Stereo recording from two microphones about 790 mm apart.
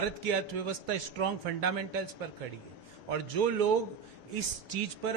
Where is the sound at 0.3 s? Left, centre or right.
Right.